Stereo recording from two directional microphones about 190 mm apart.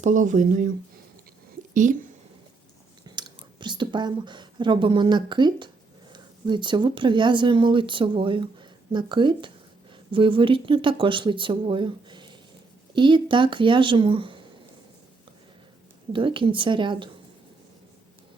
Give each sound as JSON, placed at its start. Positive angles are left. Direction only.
{"t": 0.0, "sound": "speech", "side_deg": -40}
{"t": 1.7, "sound": "a woman's voice", "side_deg": -40}
{"t": 3.2, "sound": "speech", "side_deg": -25}
{"t": 16.1, "sound": "speech", "side_deg": -25}